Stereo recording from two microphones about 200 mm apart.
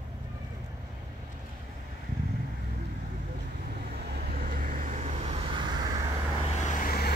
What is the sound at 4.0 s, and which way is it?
Vehicle, 55° right (ahead or behind).